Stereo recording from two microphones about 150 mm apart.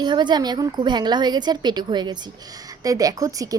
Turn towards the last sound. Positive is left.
turn(degrees=-20)  # may be behind; listen again after turning